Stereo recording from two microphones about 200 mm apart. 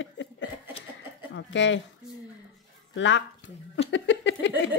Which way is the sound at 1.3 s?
65° left (ahead or behind).